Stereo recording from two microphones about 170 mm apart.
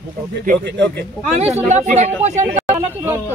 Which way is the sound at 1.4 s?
40° right (ahead or behind).